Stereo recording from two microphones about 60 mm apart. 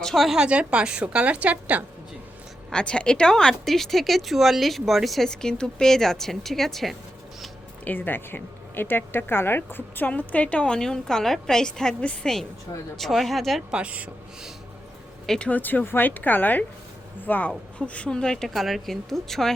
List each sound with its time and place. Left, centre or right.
0.0 s a woman's voice: centre
0.3 s a woman's voice: centre
2.7 s a woman's voice: centre
7.9 s speech: left
10.1 s a woman's voice: left
13.0 s a woman's voice: centre
13.7 s a woman's voice: centre
15.4 s a woman's voice: left
18.4 s a woman's voice: centre